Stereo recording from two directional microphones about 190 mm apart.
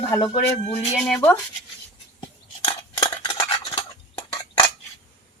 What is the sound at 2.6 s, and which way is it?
Cutlery, 30° left (ahead or behind).